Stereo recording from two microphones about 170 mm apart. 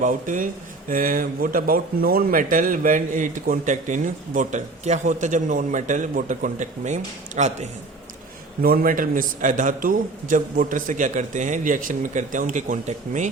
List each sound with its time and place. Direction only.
0.0 s speech: 50° right (ahead or behind)
8.6 s speech: 60° right (ahead or behind)